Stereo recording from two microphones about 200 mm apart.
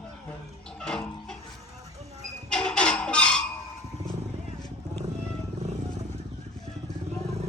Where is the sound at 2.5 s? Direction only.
5° left (ahead or behind).